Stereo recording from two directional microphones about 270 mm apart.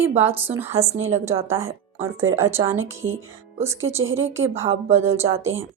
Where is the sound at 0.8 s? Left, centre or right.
Right.